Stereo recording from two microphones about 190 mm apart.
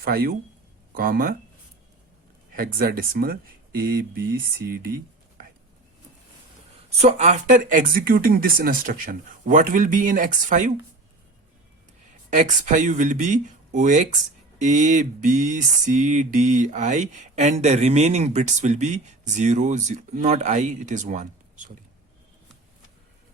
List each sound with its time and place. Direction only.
0.0 s speech: 50° right (ahead or behind)
2.6 s speech: 50° right (ahead or behind)
7.0 s speech: 35° right (ahead or behind)
12.3 s a sound: 40° right (ahead or behind)